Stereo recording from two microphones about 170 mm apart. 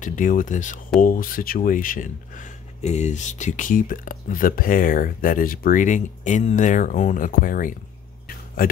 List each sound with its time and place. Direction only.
0.0 s speech: 50° left (ahead or behind)